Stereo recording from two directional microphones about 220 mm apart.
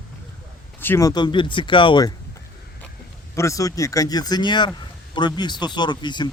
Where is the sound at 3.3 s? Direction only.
15° left (ahead or behind).